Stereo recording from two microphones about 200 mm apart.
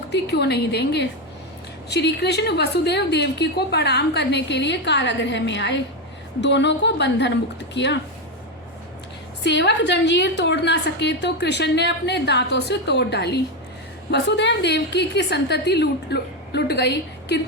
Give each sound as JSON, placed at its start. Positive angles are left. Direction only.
{"t": 0.1, "sound": "a woman's voice", "side_deg": 55}
{"t": 9.4, "sound": "a woman's voice", "side_deg": 60}